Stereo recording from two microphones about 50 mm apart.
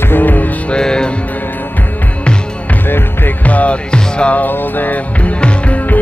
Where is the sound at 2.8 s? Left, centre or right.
Left.